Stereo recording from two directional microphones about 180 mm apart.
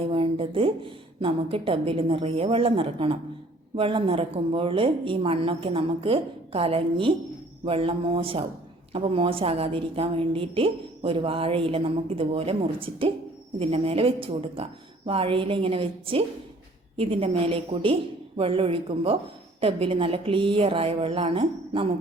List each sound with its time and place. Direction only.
0.0 s a woman's voice: 30° right (ahead or behind)